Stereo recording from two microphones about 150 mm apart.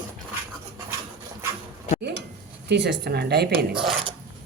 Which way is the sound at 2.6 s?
90° right.